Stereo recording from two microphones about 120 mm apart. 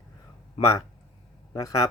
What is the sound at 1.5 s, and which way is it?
Speech, 30° left (ahead or behind).